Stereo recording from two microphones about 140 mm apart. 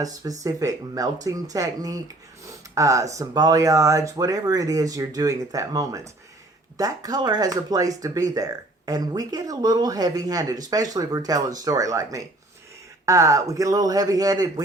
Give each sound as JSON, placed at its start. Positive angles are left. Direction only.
{"t": 0.0, "sound": "speech", "side_deg": -25}